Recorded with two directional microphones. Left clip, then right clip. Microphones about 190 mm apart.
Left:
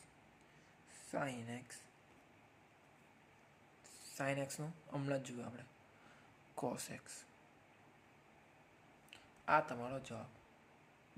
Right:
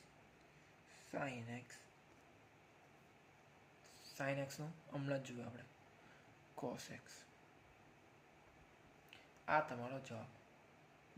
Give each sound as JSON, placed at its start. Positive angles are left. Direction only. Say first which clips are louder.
{"t": 1.1, "sound": "speech", "louder": "left 3 dB", "side_deg": 25}
{"t": 4.0, "sound": "speech", "louder": "left 2 dB", "side_deg": 25}
{"t": 9.0, "sound": "speech", "louder": "left 5 dB", "side_deg": 25}